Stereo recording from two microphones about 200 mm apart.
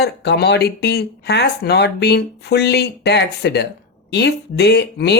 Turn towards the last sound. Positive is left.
turn(degrees=55)  # may be behind; listen again after turning